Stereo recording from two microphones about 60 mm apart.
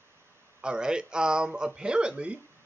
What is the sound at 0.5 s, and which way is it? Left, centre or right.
Speech, centre.